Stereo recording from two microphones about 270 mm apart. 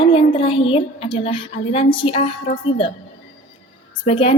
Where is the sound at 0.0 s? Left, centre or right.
Centre.